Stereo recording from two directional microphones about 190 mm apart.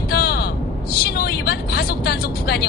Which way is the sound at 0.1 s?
55° left (ahead or behind).